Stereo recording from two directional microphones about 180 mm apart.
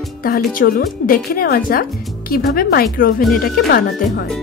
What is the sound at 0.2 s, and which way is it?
Speech, 55° left (ahead or behind).